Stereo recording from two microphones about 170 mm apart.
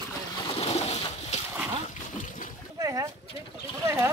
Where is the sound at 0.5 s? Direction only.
40° left (ahead or behind).